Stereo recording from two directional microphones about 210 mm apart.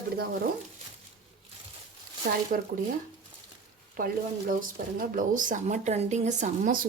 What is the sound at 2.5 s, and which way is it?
Speech, 40° right (ahead or behind).